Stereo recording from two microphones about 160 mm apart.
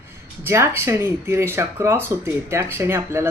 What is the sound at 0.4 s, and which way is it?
Speech, 15° right (ahead or behind).